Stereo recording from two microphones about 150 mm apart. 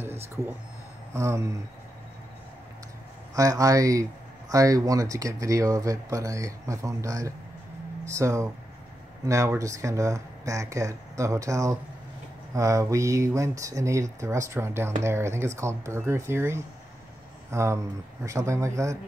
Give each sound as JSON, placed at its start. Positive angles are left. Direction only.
{"t": 0.0, "sound": "a sound", "side_deg": -15}
{"t": 1.1, "sound": "speech", "side_deg": -20}
{"t": 3.3, "sound": "speech", "side_deg": -20}